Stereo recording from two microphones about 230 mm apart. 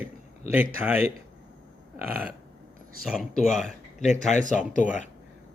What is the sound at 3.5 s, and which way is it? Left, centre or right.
Speech, left.